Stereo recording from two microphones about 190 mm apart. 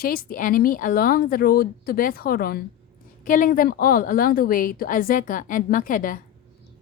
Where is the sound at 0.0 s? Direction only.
50° left (ahead or behind).